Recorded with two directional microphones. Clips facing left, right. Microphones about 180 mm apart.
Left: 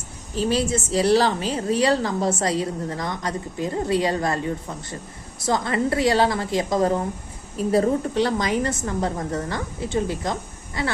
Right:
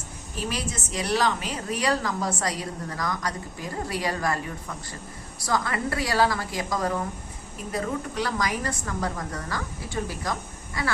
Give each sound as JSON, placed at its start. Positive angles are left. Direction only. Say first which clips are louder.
{"t": 0.3, "sound": "a woman's voice", "louder": "left 9 dB", "side_deg": 30}